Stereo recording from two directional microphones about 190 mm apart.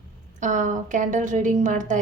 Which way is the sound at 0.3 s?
40° right (ahead or behind).